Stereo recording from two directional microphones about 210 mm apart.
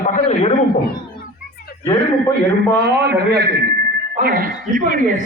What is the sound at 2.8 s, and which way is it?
A man's voice, 50° right (ahead or behind).